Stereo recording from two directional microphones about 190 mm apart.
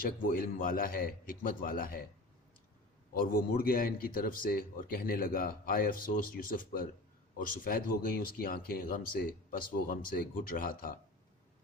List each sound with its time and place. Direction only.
0.0 s a man's voice: 50° left (ahead or behind)
3.1 s a man's voice: 50° left (ahead or behind)